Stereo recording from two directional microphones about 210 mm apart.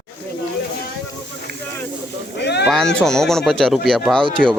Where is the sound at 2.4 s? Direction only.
55° left (ahead or behind).